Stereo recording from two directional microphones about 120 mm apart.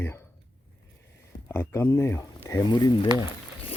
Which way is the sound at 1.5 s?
20° left (ahead or behind).